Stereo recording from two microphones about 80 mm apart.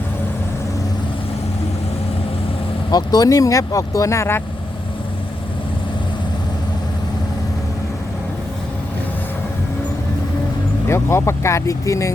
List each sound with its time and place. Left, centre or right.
2.9 s speech: left
10.8 s speech: left